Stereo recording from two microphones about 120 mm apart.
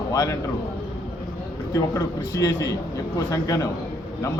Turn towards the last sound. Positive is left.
turn(degrees=30)  # may be behind; listen again after turning